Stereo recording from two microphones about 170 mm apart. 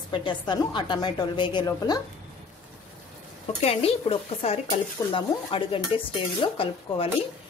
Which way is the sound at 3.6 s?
35° left (ahead or behind).